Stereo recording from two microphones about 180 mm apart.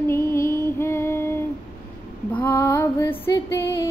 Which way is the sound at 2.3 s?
10° left (ahead or behind).